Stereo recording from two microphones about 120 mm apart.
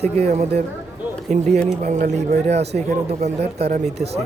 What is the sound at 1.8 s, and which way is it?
Speech, 90° right.